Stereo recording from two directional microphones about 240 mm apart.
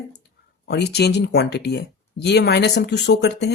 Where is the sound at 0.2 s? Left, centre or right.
Left.